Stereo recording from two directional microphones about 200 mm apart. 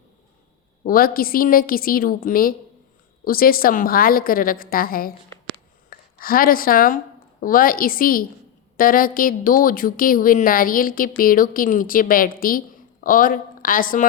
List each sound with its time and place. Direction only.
0.9 s a woman's voice: 45° left (ahead or behind)